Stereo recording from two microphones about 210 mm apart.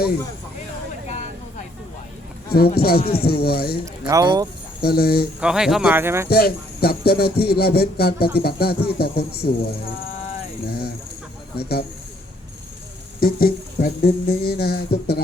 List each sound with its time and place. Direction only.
2.7 s speech: 45° left (ahead or behind)
4.0 s speech: 15° right (ahead or behind)
4.8 s speech: 45° left (ahead or behind)
5.4 s speech: 5° right (ahead or behind)
6.2 s speech: 45° left (ahead or behind)
10.7 s chicken: 50° left (ahead or behind)
11.5 s speech: 50° left (ahead or behind)
13.1 s speech: 45° left (ahead or behind)